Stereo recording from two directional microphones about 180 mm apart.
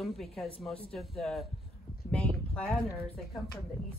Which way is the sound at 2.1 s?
5° left (ahead or behind).